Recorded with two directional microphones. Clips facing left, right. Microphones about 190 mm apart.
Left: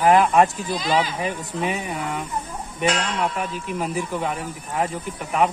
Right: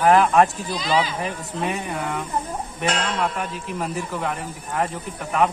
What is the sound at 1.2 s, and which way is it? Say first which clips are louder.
Speech: left 1 dB; 5° left (ahead or behind).